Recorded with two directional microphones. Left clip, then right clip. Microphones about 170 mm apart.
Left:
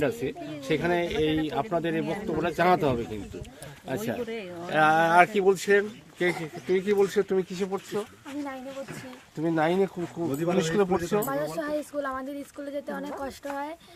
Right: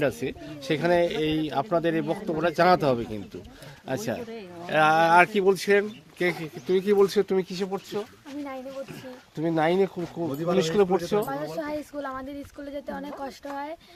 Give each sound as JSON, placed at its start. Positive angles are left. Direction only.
{"t": 0.0, "sound": "speech", "side_deg": -70}
{"t": 9.4, "sound": "speech", "side_deg": -65}
{"t": 11.3, "sound": "speech", "side_deg": 0}